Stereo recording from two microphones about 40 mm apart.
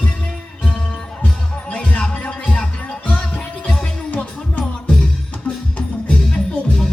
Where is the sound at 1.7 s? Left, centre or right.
Left.